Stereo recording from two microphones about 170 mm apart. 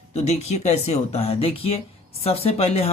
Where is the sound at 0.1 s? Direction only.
40° left (ahead or behind).